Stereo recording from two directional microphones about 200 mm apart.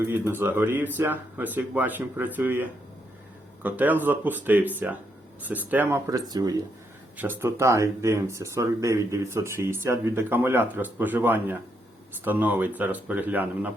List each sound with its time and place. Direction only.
0.0 s speech: 10° right (ahead or behind)